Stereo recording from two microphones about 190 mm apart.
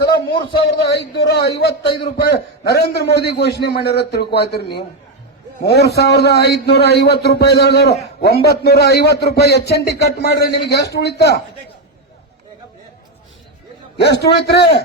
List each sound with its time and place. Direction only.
0.0 s a man's voice: 55° left (ahead or behind)
5.6 s a man's voice: 60° left (ahead or behind)
14.0 s a man's voice: 60° left (ahead or behind)